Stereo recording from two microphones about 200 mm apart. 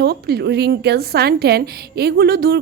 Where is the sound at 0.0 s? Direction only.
55° right (ahead or behind).